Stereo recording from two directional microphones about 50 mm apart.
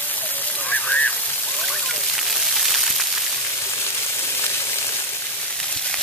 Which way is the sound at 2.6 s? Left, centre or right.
Centre.